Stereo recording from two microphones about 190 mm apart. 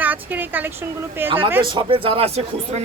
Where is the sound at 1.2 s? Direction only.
30° right (ahead or behind).